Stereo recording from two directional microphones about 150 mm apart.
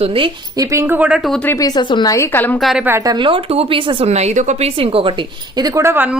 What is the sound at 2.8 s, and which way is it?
Speech, 20° right (ahead or behind).